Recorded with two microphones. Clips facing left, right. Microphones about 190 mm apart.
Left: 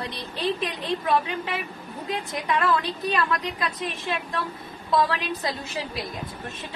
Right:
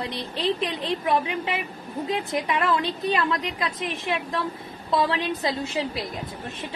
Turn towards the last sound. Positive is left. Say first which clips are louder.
# right 4 dB
turn(degrees=-25)  # may be behind; listen again after turning